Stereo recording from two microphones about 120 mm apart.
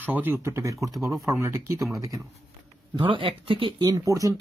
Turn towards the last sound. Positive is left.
turn(degrees=-30)  # may be behind; listen again after turning